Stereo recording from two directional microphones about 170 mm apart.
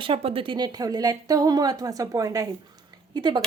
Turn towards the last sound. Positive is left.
turn(degrees=-25)  # may be behind; listen again after turning